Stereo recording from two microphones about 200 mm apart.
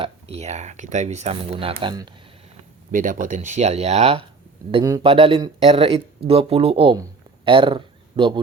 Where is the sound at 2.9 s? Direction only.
40° right (ahead or behind); by 8.4 s 25° right (ahead or behind).